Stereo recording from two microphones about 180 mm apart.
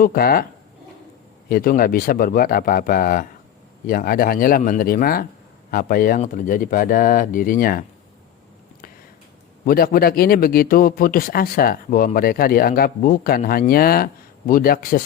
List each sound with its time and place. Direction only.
0.0 s speech: 55° left (ahead or behind)
1.5 s speech: 50° left (ahead or behind)
9.6 s speech: 55° left (ahead or behind)